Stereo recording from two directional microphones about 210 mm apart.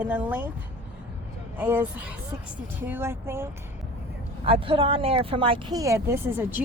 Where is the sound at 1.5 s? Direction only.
10° right (ahead or behind).